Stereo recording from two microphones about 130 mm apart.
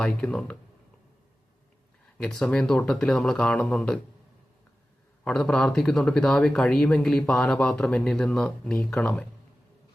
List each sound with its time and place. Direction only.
0.0 s speech: 10° left (ahead or behind)
2.1 s speech: 5° left (ahead or behind)
5.2 s speech: 5° left (ahead or behind)